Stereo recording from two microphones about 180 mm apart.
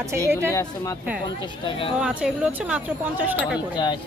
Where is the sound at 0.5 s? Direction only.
20° left (ahead or behind).